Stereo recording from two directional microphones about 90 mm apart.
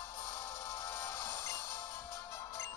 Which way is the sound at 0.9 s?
25° left (ahead or behind).